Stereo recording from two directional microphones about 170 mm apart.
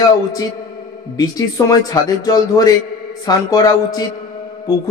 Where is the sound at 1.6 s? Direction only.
20° left (ahead or behind).